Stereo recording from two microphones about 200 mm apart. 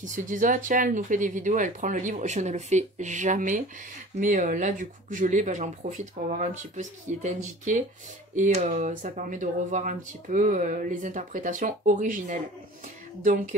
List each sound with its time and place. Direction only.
0.0 s speech: 40° right (ahead or behind)